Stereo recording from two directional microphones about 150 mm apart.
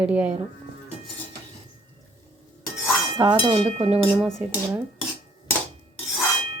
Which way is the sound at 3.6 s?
40° right (ahead or behind).